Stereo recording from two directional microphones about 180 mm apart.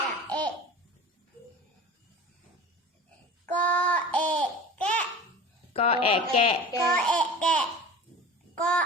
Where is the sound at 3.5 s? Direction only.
10° left (ahead or behind).